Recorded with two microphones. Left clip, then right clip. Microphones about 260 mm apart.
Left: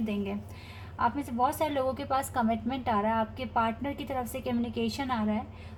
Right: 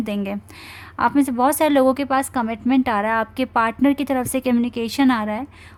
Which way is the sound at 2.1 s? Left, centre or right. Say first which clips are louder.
Right 7 dB; right.